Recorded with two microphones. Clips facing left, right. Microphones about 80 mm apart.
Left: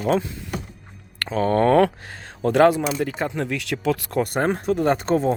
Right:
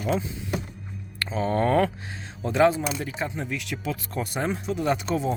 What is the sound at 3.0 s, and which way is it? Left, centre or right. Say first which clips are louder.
Speech: left 6 dB; left.